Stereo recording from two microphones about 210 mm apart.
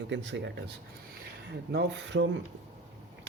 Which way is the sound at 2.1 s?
60° right (ahead or behind).